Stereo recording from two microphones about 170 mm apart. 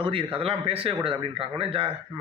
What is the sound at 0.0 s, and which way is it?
A man's voice, 30° right (ahead or behind).